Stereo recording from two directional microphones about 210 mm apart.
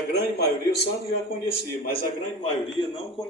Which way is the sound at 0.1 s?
50° left (ahead or behind).